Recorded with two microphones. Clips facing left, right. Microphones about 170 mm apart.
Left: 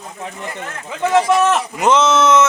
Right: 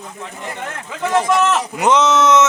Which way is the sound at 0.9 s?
15° left (ahead or behind).